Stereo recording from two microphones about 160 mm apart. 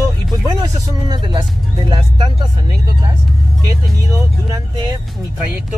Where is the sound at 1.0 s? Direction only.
25° right (ahead or behind).